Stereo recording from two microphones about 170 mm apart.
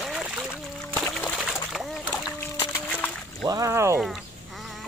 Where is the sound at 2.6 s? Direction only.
10° left (ahead or behind).